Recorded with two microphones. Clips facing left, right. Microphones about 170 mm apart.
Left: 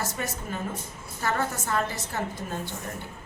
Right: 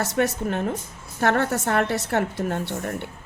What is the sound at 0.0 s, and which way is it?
Speech, 70° right (ahead or behind).